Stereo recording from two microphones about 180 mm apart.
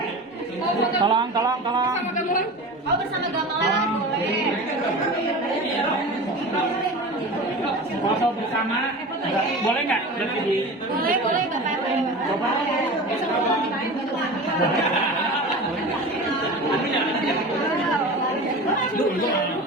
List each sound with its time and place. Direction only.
1.0 s a man's voice: 25° right (ahead or behind)